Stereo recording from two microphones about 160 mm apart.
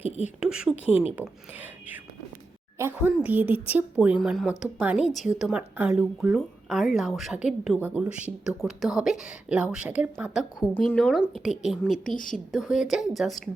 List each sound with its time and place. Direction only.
0.3 s a woman's voice: 5° right (ahead or behind)
0.9 s speech: 40° left (ahead or behind)
2.7 s a woman's voice: 15° right (ahead or behind)
10.8 s a woman's voice: centre (ahead or behind)
12.1 s speech: 55° left (ahead or behind)
12.5 s a woman's voice: centre (ahead or behind)